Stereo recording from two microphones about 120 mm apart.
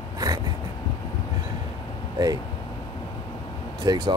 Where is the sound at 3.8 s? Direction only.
35° right (ahead or behind).